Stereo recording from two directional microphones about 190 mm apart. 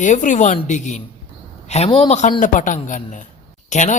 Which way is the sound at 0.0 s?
40° left (ahead or behind).